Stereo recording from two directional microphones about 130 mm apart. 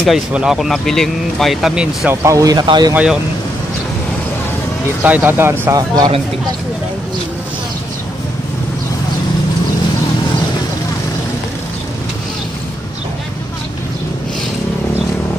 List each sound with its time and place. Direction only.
0.0 s speech: 5° right (ahead or behind)
2.2 s speech: 25° right (ahead or behind)
2.9 s speech: 10° right (ahead or behind)
5.0 s speech: 15° right (ahead or behind)
5.8 s speech: 30° right (ahead or behind)